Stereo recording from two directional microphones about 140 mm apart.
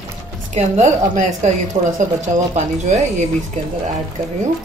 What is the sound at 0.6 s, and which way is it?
Speech, 50° right (ahead or behind).